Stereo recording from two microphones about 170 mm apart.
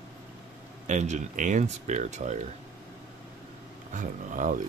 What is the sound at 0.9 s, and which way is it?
Speech, 45° right (ahead or behind).